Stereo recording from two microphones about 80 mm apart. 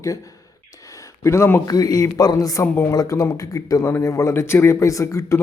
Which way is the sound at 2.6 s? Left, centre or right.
Left.